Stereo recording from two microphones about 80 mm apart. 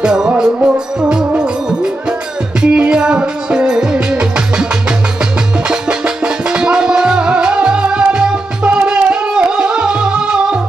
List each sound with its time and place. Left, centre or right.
0.0 s music: centre
5.7 s music: centre